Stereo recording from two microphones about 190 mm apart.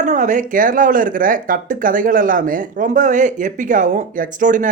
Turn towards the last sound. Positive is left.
turn(degrees=-45)  # may be behind; listen again after turning